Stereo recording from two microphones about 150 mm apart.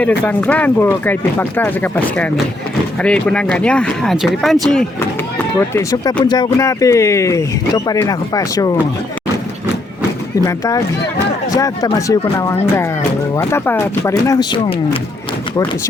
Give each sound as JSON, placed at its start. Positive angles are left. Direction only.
{"t": 0.3, "sound": "speech", "side_deg": 10}
{"t": 5.5, "sound": "speech", "side_deg": 20}
{"t": 10.4, "sound": "speech", "side_deg": 20}